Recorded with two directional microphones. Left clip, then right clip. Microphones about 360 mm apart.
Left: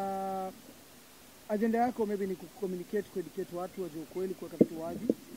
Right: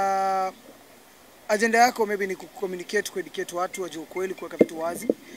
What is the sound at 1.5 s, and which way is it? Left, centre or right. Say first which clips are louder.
Speech: right 11 dB; centre.